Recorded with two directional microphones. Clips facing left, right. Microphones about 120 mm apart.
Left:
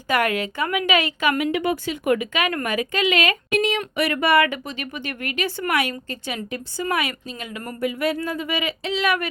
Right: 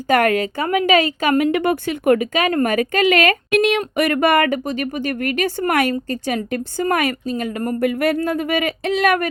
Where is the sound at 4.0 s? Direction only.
50° right (ahead or behind).